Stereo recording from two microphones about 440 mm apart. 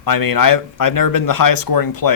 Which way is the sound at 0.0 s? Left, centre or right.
Left.